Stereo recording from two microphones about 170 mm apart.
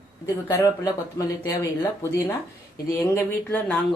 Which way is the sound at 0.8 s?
20° left (ahead or behind).